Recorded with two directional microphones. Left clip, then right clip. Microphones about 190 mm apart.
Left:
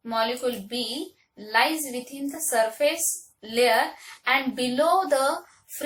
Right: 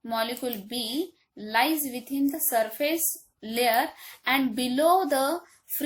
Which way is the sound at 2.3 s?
50° right (ahead or behind).